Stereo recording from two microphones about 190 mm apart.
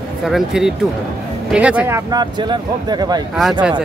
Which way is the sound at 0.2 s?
Centre (ahead or behind).